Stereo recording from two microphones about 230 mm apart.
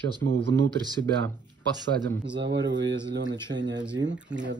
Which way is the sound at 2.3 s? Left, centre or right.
Right.